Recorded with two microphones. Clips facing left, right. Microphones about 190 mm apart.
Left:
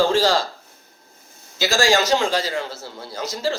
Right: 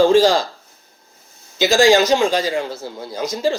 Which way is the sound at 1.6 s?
15° right (ahead or behind).